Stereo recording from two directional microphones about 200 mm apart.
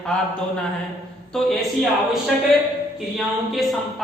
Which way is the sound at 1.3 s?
Centre (ahead or behind).